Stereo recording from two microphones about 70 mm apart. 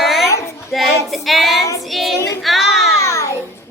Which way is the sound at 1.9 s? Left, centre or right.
Centre.